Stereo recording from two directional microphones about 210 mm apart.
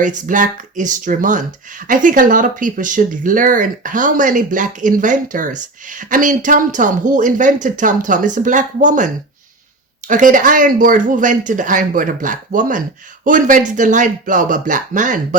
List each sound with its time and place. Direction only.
0.0 s speech: 40° right (ahead or behind)
10.1 s speech: 40° right (ahead or behind)